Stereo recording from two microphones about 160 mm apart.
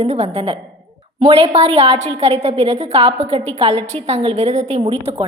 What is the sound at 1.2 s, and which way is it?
A woman's voice, 40° right (ahead or behind).